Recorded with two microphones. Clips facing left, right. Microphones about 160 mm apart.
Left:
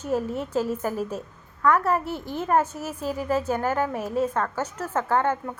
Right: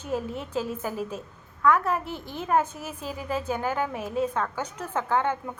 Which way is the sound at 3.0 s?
40° left (ahead or behind).